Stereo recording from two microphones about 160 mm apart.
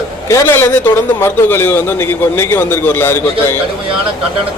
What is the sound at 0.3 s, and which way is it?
A man's voice, 15° left (ahead or behind).